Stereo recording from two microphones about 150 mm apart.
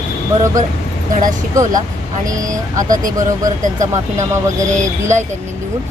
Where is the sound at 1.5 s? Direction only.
25° right (ahead or behind).